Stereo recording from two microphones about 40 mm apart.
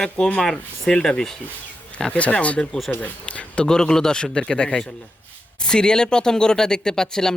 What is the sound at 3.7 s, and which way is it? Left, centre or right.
Speech, centre.